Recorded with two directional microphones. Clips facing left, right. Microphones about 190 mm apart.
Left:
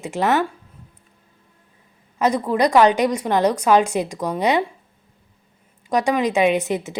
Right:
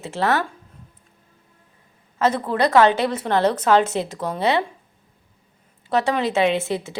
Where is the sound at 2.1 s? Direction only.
15° left (ahead or behind).